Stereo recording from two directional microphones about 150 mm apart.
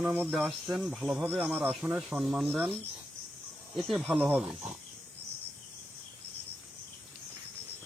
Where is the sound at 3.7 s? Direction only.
Centre (ahead or behind).